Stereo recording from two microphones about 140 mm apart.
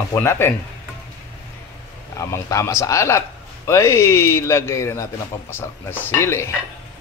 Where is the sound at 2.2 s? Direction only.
20° left (ahead or behind).